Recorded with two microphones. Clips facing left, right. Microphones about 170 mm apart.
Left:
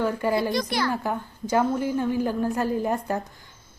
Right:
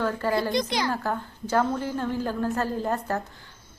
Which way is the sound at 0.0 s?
15° left (ahead or behind).